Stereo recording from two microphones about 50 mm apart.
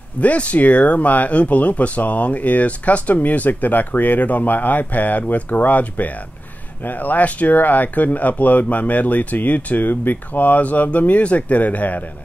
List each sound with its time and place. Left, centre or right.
0.2 s speech: left